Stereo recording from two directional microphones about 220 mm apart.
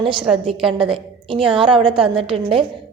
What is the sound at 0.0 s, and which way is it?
A woman's voice, 20° right (ahead or behind).